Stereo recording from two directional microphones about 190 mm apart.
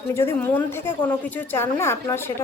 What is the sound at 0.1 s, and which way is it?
A woman's voice, 10° left (ahead or behind).